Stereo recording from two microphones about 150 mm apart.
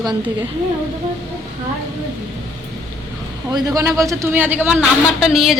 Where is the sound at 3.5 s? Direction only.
20° right (ahead or behind); by 5.6 s centre (ahead or behind).